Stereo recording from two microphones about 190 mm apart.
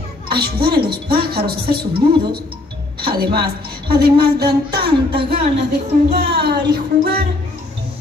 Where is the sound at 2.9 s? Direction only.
55° right (ahead or behind).